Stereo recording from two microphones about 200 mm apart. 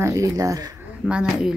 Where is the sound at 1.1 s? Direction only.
5° right (ahead or behind).